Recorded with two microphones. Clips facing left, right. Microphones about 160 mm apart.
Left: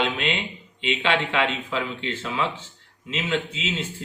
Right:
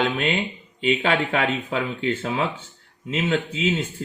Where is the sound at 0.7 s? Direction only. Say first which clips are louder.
Right 3 dB; 40° right (ahead or behind).